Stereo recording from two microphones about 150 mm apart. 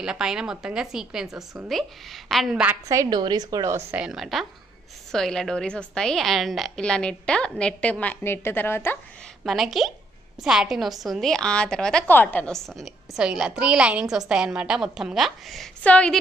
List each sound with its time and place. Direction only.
0.0 s a woman's voice: 5° right (ahead or behind)
2.9 s a woman's voice: 25° right (ahead or behind)
3.9 s a woman's voice: 5° right (ahead or behind); by 8.9 s 15° left (ahead or behind)
9.4 s a woman's voice: centre (ahead or behind)